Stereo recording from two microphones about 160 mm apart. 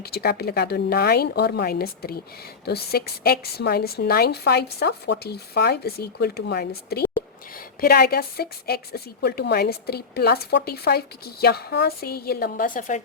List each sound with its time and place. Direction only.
0.0 s a woman's voice: 85° left
7.5 s a woman's voice: 65° left (ahead or behind)